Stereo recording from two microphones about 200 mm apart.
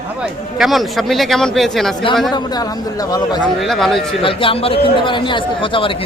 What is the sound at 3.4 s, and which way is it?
Speech, centre (ahead or behind).